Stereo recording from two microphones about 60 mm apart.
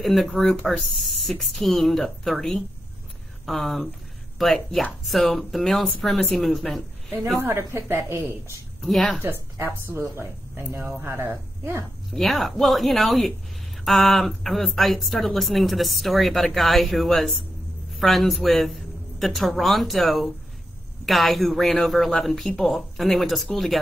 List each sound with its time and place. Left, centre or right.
0.0 s speech: centre
7.3 s speech: right
8.8 s speech: centre
9.2 s a woman's voice: right
12.1 s a woman's voice: centre